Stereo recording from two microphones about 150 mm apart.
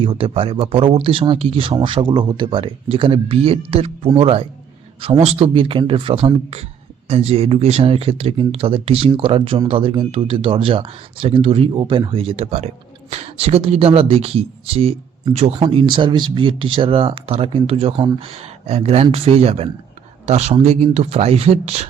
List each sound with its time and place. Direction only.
0.0 s speech: 35° right (ahead or behind)